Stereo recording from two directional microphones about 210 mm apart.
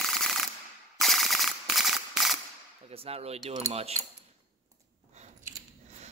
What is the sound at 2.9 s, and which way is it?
A man's voice, 30° right (ahead or behind).